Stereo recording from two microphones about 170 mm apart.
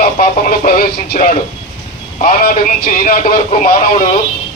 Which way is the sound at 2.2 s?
60° left (ahead or behind).